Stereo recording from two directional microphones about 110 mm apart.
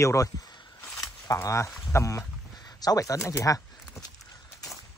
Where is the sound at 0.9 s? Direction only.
30° left (ahead or behind).